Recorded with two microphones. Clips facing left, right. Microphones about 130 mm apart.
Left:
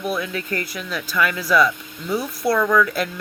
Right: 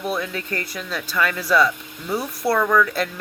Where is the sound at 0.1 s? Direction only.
30° right (ahead or behind).